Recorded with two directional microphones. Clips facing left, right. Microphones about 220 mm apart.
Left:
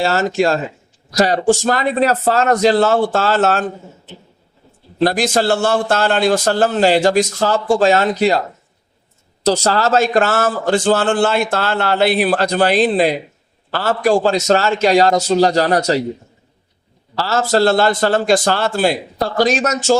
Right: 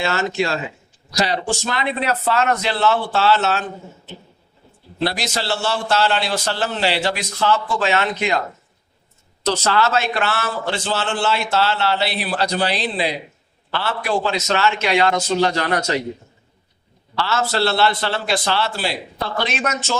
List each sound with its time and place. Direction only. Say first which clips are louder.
0.0 s a man's voice: left 5 dB; 40° left (ahead or behind)
5.0 s a man's voice: left 8 dB; 50° left (ahead or behind)
9.6 s a man's voice: left 2 dB; 40° left (ahead or behind)
17.2 s a man's voice: left 5 dB; 40° left (ahead or behind)